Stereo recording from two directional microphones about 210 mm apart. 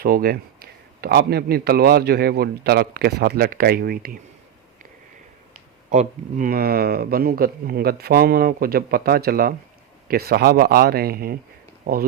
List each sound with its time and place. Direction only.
0.0 s speech: 45° right (ahead or behind)
5.9 s speech: 35° right (ahead or behind)